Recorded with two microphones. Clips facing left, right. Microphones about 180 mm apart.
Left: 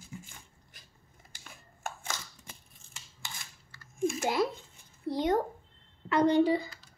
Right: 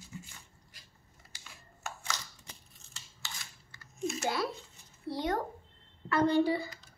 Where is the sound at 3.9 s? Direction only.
50° left (ahead or behind).